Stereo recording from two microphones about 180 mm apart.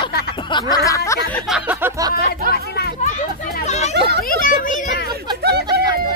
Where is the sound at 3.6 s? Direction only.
40° left (ahead or behind).